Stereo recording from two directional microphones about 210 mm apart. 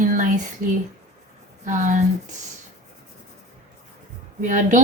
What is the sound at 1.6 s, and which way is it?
Speech, 35° right (ahead or behind).